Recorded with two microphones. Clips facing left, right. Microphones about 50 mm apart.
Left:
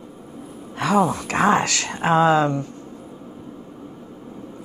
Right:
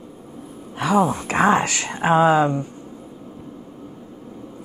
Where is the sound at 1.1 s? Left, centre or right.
Centre.